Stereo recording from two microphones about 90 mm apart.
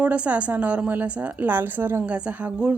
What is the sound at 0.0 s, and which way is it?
Speech, 15° right (ahead or behind).